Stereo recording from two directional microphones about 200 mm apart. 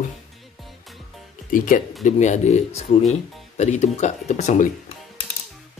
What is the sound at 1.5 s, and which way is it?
Speech, 40° left (ahead or behind).